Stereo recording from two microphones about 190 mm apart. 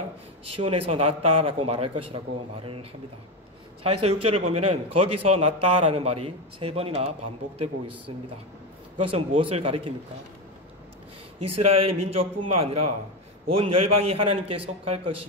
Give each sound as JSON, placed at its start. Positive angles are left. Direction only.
{"t": 0.5, "sound": "a man's voice", "side_deg": -30}
{"t": 8.9, "sound": "speech", "side_deg": -30}
{"t": 12.1, "sound": "a man's voice", "side_deg": -30}